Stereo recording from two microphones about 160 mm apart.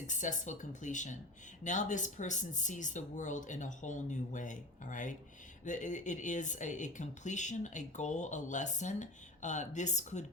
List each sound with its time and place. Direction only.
0.1 s speech: 50° left (ahead or behind)